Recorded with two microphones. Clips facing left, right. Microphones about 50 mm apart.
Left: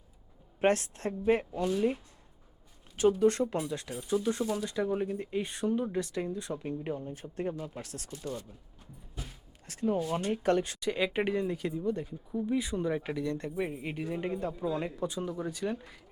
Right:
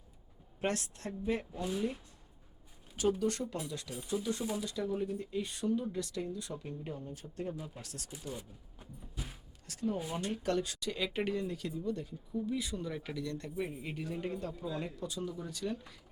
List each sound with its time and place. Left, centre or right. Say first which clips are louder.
0.6 s speech: left 8 dB; left
1.5 s speech: left 6 dB; centre
3.2 s speech: left 8 dB; left
8.1 s speech: left 5 dB; centre
9.6 s speech: left 6 dB; left